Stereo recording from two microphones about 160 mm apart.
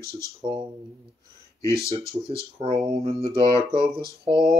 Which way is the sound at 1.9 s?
35° right (ahead or behind).